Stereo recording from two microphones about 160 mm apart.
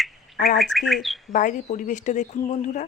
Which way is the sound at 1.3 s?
50° left (ahead or behind).